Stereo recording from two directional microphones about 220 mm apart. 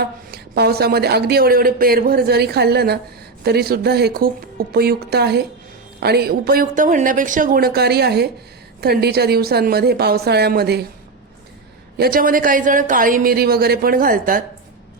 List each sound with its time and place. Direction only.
0.0 s speech: 45° right (ahead or behind)
11.9 s speech: 45° right (ahead or behind)